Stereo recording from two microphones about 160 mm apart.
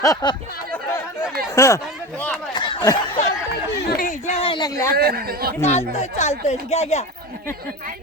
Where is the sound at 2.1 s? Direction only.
10° left (ahead or behind).